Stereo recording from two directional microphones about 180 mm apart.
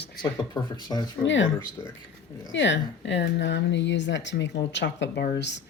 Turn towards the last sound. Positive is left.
turn(degrees=70)  # may be behind; listen again after turning